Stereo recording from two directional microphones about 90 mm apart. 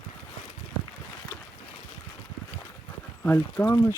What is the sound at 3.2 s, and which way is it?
Speech, 25° left (ahead or behind).